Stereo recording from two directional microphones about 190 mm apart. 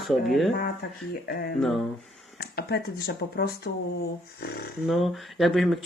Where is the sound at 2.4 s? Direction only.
55° left (ahead or behind).